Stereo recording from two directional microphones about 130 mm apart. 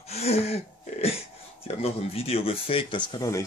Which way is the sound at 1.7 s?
50° left (ahead or behind).